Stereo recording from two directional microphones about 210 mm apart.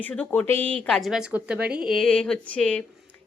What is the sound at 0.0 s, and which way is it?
A woman's voice, 5° left (ahead or behind).